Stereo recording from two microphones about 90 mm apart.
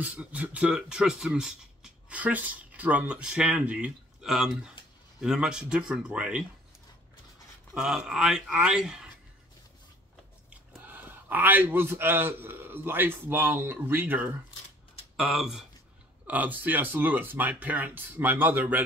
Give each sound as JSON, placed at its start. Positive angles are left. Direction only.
{"t": 0.0, "sound": "speech", "side_deg": -15}
{"t": 7.7, "sound": "speech", "side_deg": -5}
{"t": 10.8, "sound": "a man's voice", "side_deg": -20}
{"t": 15.1, "sound": "speech", "side_deg": 0}
{"t": 16.3, "sound": "speech", "side_deg": -20}